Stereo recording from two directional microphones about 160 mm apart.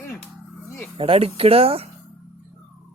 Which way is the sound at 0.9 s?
35° right (ahead or behind).